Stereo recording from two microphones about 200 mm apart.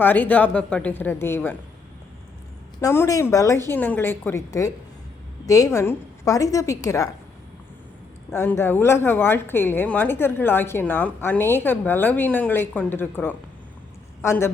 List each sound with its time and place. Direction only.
0.0 s a woman's voice: 10° left (ahead or behind)
2.8 s a woman's voice: 15° left (ahead or behind)
8.3 s a woman's voice: 10° left (ahead or behind)